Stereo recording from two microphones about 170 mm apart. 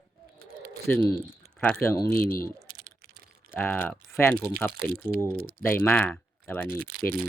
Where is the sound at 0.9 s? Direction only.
10° left (ahead or behind).